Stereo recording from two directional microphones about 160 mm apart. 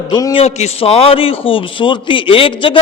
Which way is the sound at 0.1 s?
20° left (ahead or behind).